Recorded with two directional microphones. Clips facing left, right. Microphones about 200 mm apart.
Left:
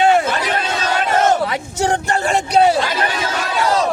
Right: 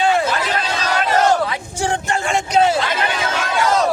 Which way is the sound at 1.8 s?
40° left (ahead or behind).